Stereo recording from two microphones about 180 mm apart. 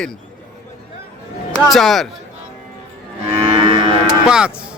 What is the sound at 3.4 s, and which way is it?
Livestock, 30° right (ahead or behind).